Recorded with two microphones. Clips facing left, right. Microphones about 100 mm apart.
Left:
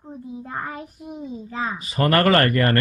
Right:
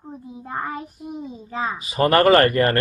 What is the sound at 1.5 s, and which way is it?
Speech, 15° right (ahead or behind).